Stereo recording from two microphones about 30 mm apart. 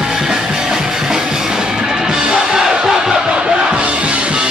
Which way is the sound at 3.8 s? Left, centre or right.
Right.